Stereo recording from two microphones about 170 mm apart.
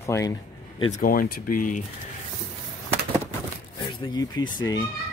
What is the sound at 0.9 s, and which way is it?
Speech, 55° left (ahead or behind).